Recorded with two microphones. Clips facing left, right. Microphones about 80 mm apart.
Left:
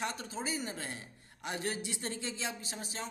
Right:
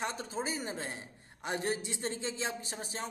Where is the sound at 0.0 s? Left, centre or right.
Right.